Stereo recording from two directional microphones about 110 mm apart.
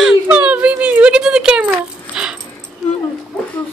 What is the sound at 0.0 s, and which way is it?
Whimper, 10° right (ahead or behind).